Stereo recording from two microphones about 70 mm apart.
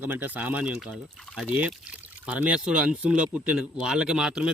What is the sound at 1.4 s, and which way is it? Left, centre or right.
Speech, right.